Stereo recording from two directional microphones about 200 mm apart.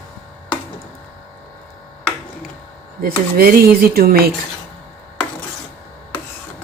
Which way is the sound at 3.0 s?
45° right (ahead or behind).